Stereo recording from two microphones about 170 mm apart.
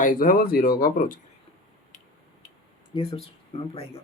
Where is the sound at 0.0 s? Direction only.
55° left (ahead or behind).